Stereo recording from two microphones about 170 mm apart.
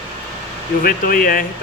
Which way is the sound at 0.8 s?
55° left (ahead or behind).